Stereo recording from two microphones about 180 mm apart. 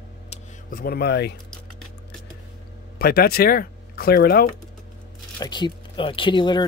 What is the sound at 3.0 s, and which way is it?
Speech, 60° left (ahead or behind).